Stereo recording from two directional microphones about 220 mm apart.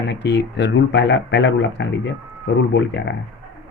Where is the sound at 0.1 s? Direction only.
50° left (ahead or behind).